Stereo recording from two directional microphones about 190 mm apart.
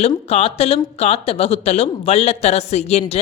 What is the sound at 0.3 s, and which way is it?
Speech, 35° left (ahead or behind).